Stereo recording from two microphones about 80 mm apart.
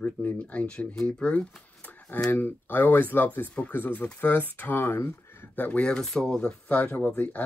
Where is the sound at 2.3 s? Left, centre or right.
Left.